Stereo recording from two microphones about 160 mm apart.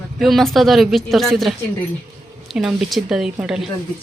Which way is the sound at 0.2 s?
Centre (ahead or behind).